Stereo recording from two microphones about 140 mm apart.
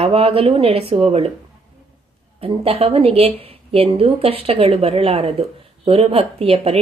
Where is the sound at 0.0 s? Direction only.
45° right (ahead or behind).